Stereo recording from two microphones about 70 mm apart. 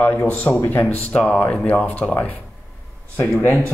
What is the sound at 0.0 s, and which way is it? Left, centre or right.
Speech, left.